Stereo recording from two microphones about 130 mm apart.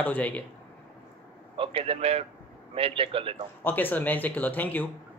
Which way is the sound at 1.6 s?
45° right (ahead or behind).